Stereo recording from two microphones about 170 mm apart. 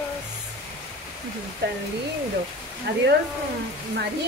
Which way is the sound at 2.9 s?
85° right.